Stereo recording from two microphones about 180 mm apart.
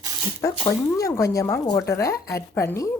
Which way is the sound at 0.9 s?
20° left (ahead or behind).